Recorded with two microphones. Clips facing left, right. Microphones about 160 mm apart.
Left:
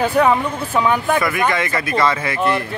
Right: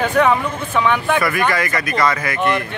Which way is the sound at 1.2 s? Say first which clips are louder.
Even; 20° left (ahead or behind).